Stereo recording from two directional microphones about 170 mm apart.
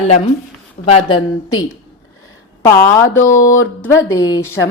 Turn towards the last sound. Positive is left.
turn(degrees=15)  # may be behind; listen again after turning